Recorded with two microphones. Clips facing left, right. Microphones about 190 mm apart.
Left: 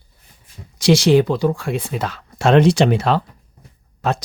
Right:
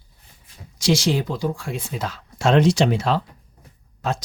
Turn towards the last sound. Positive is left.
turn(degrees=65)  # may be behind; listen again after turning